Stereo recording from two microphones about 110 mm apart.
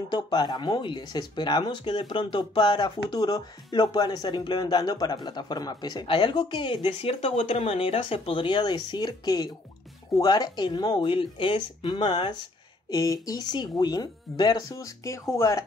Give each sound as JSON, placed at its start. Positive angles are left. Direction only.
{"t": 0.1, "sound": "speech", "side_deg": 40}